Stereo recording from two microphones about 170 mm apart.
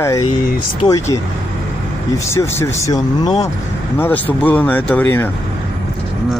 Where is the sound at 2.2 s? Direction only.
15° left (ahead or behind).